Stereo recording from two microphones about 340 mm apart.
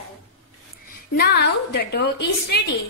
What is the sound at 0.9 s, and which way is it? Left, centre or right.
A woman's voice, left.